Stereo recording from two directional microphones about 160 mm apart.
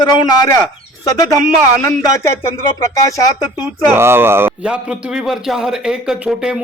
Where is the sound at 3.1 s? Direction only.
20° left (ahead or behind).